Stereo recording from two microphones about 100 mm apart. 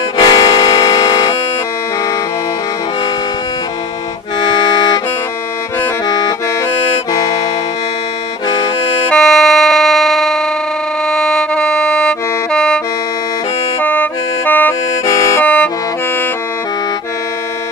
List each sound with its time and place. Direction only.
0.2 s air horn: 45° left (ahead or behind)
1.0 s a sound: 40° left (ahead or behind)
4.4 s music: 45° left (ahead or behind)
6.0 s accordion: 40° left (ahead or behind)
8.5 s accordion: 65° left (ahead or behind)
9.1 s music: 5° left (ahead or behind)
13.7 s music: 20° left (ahead or behind)
15.0 s music: 35° left (ahead or behind)
15.4 s music: 15° left (ahead or behind)